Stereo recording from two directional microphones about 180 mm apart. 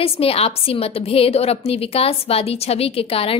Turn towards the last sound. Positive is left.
turn(degrees=30)  # may be behind; listen again after turning